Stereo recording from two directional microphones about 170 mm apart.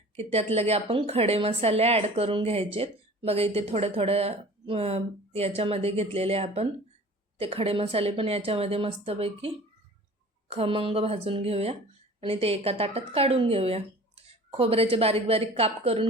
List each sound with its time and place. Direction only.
0.2 s speech: 35° right (ahead or behind)
10.5 s speech: 30° right (ahead or behind)